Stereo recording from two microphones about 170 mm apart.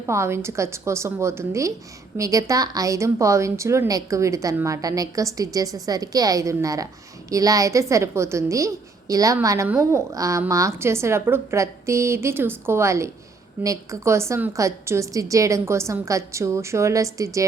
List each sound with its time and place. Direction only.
0.0 s a woman's voice: 15° right (ahead or behind)